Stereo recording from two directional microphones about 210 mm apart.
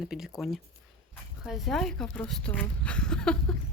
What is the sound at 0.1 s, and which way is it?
Speech, centre (ahead or behind).